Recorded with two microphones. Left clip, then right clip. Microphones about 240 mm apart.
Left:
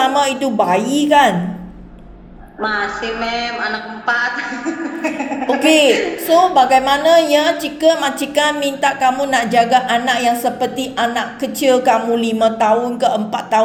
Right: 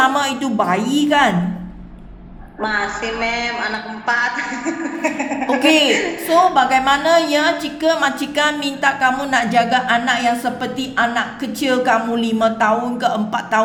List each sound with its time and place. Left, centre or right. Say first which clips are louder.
0.0 s a woman's voice: left 2 dB; centre
2.6 s a woman's voice: left 1 dB; centre
5.6 s a woman's voice: left 3 dB; centre
7.1 s a woman's voice: left 5 dB; right
7.9 s a woman's voice: left 1 dB; centre